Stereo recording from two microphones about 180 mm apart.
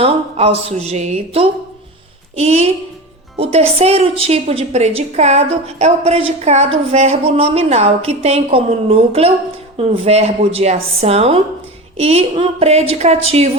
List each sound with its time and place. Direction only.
0.0 s a woman's voice: 35° right (ahead or behind)